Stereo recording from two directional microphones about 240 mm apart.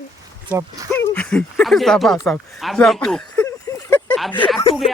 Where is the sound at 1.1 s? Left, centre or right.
Centre.